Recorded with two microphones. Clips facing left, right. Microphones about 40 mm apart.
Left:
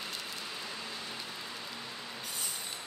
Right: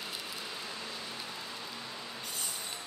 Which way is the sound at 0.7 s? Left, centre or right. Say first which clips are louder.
Even; centre.